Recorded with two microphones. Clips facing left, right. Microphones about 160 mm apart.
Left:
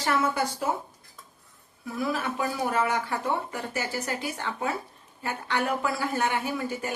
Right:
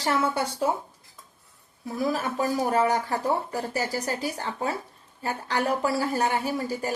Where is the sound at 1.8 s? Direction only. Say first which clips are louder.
Right 2 dB; 40° right (ahead or behind).